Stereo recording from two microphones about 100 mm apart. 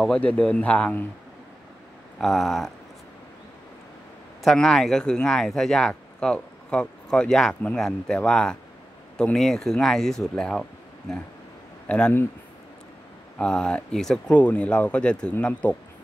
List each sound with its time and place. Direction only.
0.0 s speech: 10° left (ahead or behind)
2.1 s speech: 5° left (ahead or behind)
4.4 s speech: 5° left (ahead or behind)
11.9 s speech: 15° left (ahead or behind)
13.4 s speech: 10° left (ahead or behind)